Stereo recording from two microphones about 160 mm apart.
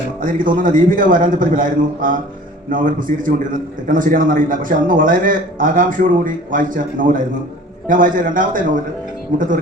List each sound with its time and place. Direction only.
0.2 s a man's voice: 55° right (ahead or behind)